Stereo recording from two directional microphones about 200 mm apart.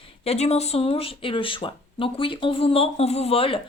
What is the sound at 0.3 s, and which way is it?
A woman's voice, 30° left (ahead or behind).